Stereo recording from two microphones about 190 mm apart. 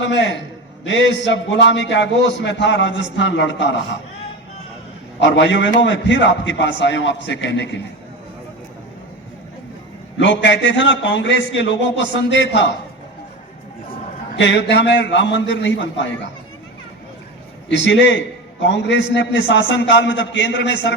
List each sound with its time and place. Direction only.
0.0 s a man's voice: 70° left (ahead or behind)
5.2 s a man's voice: 70° left (ahead or behind)
10.2 s a man's voice: 75° left (ahead or behind)
14.3 s a man's voice: 70° left (ahead or behind)
17.7 s a man's voice: 70° left (ahead or behind)